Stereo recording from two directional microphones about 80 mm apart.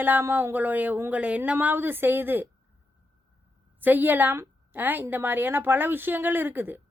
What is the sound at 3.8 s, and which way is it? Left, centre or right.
Speech, right.